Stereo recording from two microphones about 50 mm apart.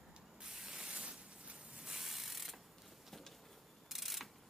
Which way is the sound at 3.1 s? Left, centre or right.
Centre.